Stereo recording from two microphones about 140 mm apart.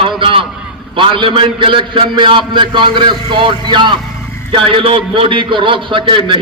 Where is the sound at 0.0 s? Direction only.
40° right (ahead or behind).